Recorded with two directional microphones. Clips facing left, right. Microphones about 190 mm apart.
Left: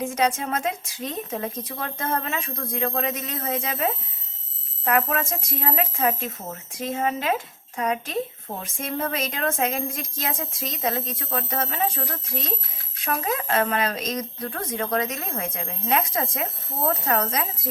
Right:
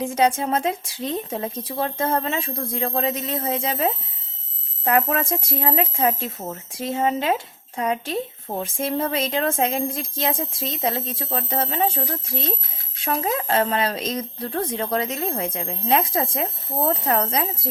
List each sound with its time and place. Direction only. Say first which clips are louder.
0.0 s speech: right 3 dB; 30° right (ahead or behind)